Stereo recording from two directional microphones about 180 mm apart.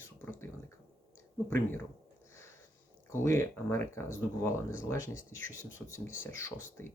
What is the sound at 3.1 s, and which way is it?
Speech, 15° left (ahead or behind).